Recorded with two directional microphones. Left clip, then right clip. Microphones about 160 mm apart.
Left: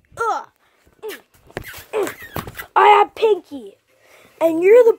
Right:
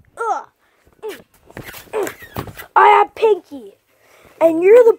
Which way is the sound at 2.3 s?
15° left (ahead or behind).